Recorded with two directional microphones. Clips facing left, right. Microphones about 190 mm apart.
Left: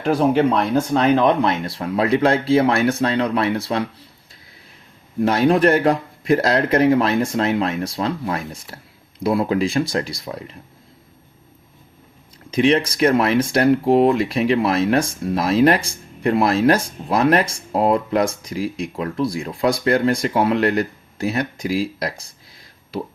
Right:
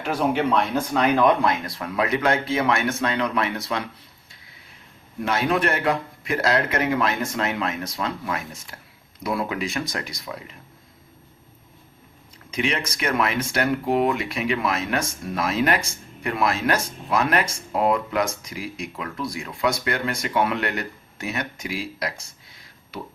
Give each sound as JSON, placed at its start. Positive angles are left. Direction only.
{"t": 0.0, "sound": "speech", "side_deg": 35}
{"t": 1.1, "sound": "speech", "side_deg": 25}
{"t": 5.2, "sound": "speech", "side_deg": 35}
{"t": 12.5, "sound": "speech", "side_deg": 35}